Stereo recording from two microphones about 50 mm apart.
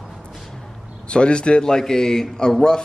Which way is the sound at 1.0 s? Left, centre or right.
Left.